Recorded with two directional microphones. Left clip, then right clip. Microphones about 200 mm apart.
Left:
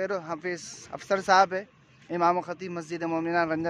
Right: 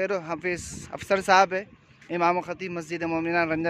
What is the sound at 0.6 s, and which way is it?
Speech, 35° right (ahead or behind).